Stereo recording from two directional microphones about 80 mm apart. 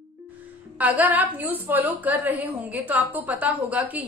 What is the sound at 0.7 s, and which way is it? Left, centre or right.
A woman's voice, centre.